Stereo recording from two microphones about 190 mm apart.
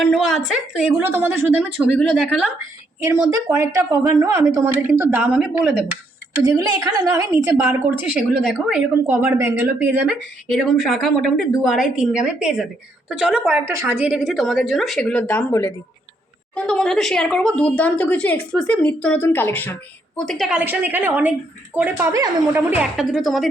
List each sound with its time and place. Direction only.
0.0 s a woman's voice: centre (ahead or behind)
2.0 s a woman's voice: centre (ahead or behind)
3.2 s a woman's voice: 15° right (ahead or behind)
6.3 s a woman's voice: 15° right (ahead or behind)
10.5 s a woman's voice: centre (ahead or behind)